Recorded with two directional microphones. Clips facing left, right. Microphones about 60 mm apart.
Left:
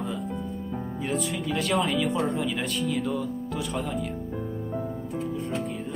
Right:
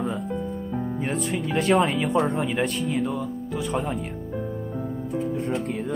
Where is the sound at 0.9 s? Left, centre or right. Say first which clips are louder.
Even; right.